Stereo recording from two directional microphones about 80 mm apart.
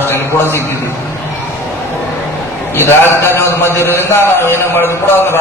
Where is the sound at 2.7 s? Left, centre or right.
Left.